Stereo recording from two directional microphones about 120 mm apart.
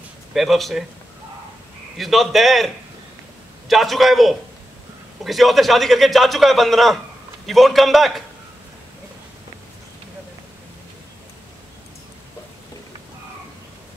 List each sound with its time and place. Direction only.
0.3 s a man's voice: centre (ahead or behind)
2.0 s a man's voice: centre (ahead or behind)